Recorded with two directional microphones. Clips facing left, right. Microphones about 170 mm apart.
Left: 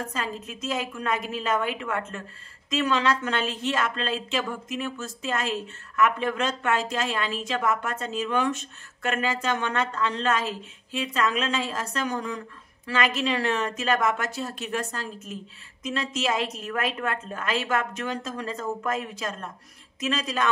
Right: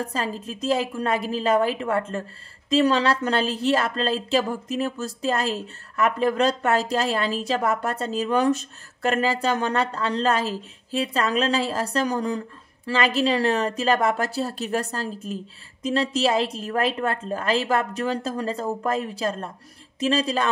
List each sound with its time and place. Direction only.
0.0 s a woman's voice: 35° right (ahead or behind)